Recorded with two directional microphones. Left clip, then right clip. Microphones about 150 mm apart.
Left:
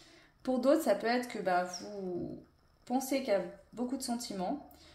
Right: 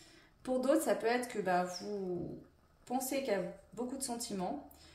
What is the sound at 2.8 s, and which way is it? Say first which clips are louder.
Speech: left 3 dB; 35° left (ahead or behind).